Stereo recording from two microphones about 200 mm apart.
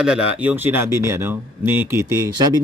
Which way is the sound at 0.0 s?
5° right (ahead or behind).